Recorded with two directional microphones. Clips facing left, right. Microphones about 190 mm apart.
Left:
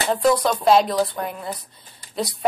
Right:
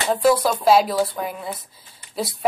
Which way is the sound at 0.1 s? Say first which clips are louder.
Right 1 dB; 5° right (ahead or behind).